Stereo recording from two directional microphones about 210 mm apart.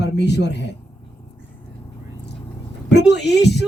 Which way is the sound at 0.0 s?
55° left (ahead or behind).